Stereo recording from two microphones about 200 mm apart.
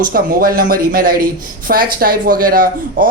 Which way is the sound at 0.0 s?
45° right (ahead or behind).